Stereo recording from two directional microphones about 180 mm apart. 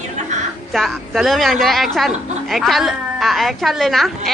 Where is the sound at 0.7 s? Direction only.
Centre (ahead or behind).